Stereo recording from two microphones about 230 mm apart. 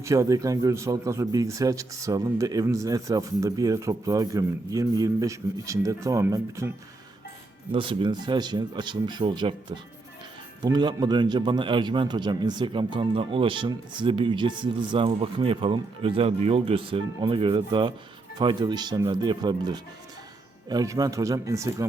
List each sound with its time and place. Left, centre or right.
0.0 s speech: centre
7.7 s a man's voice: right